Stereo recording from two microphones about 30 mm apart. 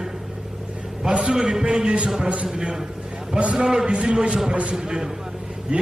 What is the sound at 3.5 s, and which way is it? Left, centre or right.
Speech, centre.